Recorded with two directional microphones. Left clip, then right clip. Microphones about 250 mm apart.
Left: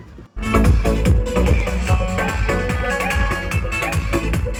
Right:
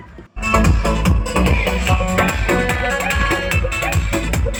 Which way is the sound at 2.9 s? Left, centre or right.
Right.